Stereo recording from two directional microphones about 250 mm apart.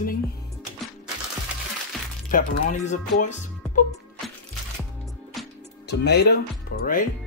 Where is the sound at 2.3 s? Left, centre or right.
Left.